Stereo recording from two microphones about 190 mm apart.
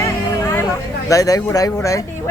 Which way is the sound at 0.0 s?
15° left (ahead or behind).